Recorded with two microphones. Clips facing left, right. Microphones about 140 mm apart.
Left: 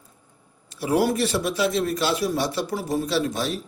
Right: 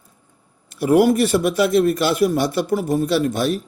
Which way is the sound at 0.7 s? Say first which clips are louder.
Right 7 dB; 55° right (ahead or behind).